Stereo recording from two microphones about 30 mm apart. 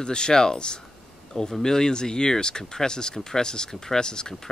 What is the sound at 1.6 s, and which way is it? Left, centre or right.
Speech, left.